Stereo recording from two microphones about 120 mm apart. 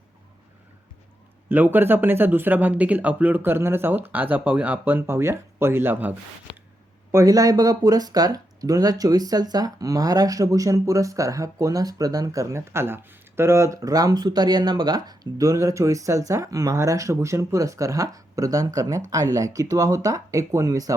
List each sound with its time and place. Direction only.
1.5 s speech: 15° right (ahead or behind)
7.1 s speech: 25° right (ahead or behind)